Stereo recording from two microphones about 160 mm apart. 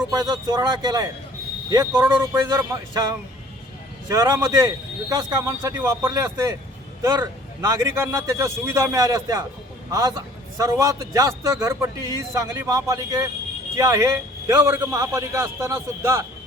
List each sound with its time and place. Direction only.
0.0 s a man's voice: 25° right (ahead or behind)
2.1 s a man's voice: 10° right (ahead or behind)
2.9 s a man's voice: 25° right (ahead or behind)